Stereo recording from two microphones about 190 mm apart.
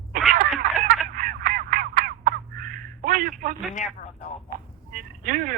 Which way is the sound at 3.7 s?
40° left (ahead or behind).